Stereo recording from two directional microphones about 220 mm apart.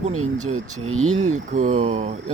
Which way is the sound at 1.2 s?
35° right (ahead or behind).